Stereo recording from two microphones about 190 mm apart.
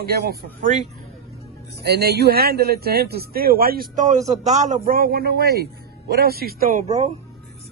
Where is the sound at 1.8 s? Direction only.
60° right (ahead or behind); by 7.1 s 35° right (ahead or behind).